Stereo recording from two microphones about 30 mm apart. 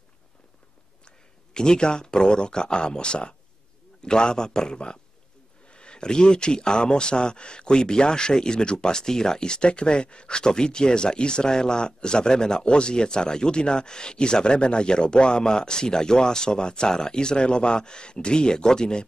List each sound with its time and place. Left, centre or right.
1.0 s speech: left